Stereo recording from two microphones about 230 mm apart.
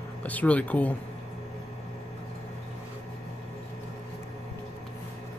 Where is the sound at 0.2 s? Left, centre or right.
Centre.